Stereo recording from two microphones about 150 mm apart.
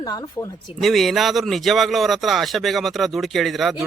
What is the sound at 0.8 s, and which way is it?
Speech, centre (ahead or behind).